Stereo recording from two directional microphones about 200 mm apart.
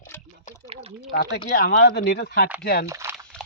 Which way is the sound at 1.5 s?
50° left (ahead or behind).